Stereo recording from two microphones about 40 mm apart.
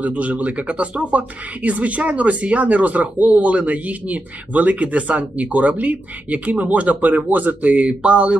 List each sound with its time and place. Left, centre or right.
0.0 s speech: right